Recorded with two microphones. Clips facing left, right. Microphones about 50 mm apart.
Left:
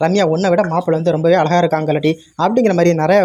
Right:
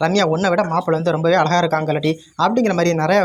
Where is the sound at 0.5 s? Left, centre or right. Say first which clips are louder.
Left 3 dB; left.